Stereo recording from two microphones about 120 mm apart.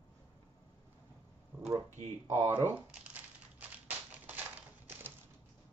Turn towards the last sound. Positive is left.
turn(degrees=-15)  # may be behind; listen again after turning